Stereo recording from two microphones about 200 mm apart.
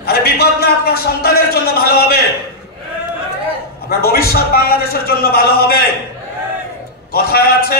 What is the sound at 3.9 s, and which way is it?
A man's voice, 50° left (ahead or behind).